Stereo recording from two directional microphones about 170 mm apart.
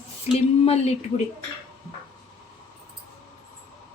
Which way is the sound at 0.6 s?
35° left (ahead or behind).